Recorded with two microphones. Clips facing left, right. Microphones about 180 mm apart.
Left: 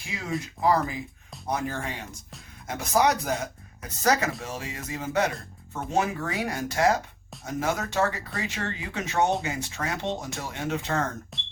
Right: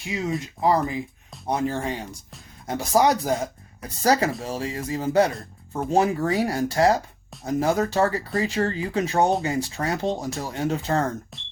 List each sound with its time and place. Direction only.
0.1 s speech: 25° right (ahead or behind)
11.3 s speech: centre (ahead or behind)